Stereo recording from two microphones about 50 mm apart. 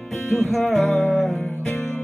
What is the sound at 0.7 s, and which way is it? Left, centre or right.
Music, centre.